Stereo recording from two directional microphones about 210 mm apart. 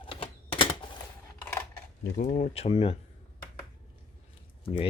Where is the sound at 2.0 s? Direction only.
35° left (ahead or behind).